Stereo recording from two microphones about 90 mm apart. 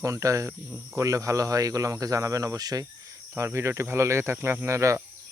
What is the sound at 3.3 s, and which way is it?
Speech, 30° right (ahead or behind).